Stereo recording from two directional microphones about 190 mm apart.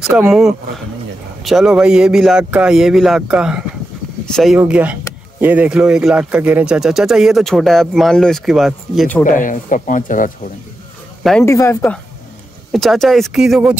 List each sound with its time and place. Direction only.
0.0 s speech: 5° right (ahead or behind)
9.2 s speech: 45° left (ahead or behind)
11.4 s speech: 15° left (ahead or behind)
12.7 s speech: centre (ahead or behind)